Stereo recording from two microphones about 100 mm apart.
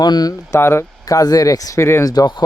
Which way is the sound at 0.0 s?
45° left (ahead or behind).